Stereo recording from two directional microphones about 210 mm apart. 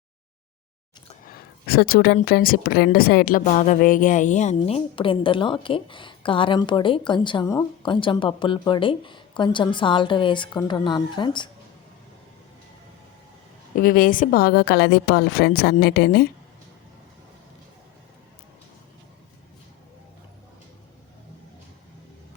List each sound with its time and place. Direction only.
1.2 s speech: 45° left (ahead or behind); by 11.4 s 20° left (ahead or behind)
13.7 s a woman's voice: 40° left (ahead or behind)